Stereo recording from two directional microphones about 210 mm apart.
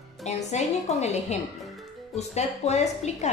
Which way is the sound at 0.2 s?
30° left (ahead or behind).